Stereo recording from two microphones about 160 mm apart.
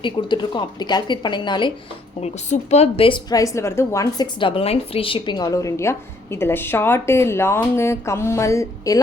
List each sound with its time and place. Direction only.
0.0 s a woman's voice: 30° left (ahead or behind)
2.2 s a woman's voice: 45° left (ahead or behind); by 9.0 s 20° left (ahead or behind)